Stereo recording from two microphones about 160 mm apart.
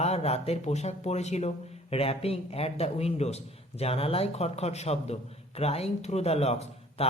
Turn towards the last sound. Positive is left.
turn(degrees=40)  # may be behind; listen again after turning